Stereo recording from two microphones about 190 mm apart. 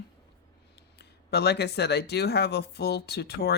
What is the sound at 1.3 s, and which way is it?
Speech, 60° left (ahead or behind).